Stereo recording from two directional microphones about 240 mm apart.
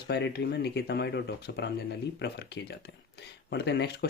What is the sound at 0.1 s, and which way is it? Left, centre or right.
Speech, left.